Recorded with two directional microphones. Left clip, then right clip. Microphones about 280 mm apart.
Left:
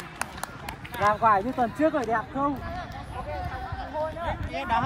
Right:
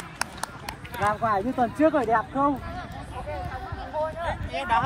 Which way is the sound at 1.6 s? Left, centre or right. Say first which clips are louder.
Right 3 dB; centre.